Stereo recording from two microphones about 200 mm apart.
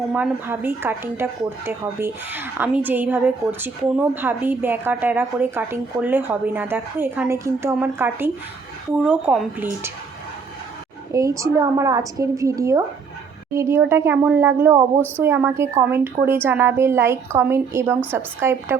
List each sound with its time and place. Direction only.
0.1 s speech: 10° right (ahead or behind)
11.1 s speech: 15° right (ahead or behind)